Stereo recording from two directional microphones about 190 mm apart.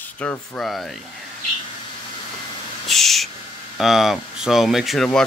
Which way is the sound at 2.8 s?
Centre (ahead or behind).